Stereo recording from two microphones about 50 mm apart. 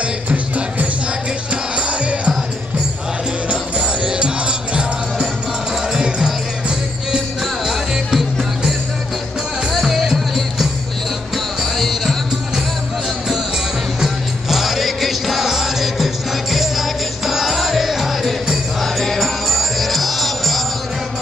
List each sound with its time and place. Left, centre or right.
0.0 s music: right
3.4 s music: right
5.9 s music: centre
7.6 s music: centre
9.7 s music: centre
13.9 s music: centre